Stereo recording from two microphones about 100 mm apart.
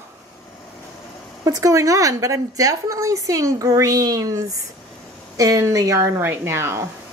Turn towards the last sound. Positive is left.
turn(degrees=-25)  # may be behind; listen again after turning